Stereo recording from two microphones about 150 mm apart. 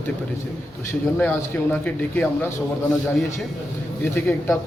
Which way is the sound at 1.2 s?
10° left (ahead or behind).